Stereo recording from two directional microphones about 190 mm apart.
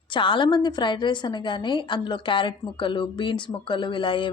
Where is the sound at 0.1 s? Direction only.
25° left (ahead or behind).